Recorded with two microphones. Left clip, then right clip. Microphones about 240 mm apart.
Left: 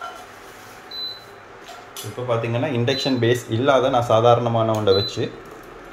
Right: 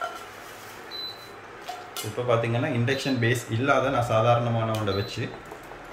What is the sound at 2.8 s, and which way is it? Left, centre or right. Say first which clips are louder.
Speech: left 5 dB; centre.